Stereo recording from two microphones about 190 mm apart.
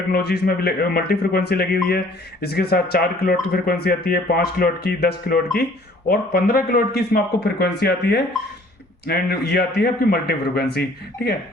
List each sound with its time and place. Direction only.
0.1 s speech: 55° left (ahead or behind)